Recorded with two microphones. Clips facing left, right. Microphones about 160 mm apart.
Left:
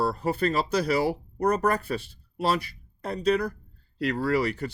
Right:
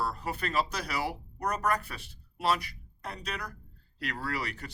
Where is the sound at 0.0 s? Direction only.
30° left (ahead or behind).